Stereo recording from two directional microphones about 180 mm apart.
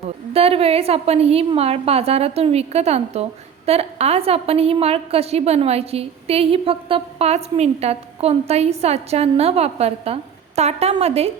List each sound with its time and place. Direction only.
0.3 s a woman's voice: 35° right (ahead or behind)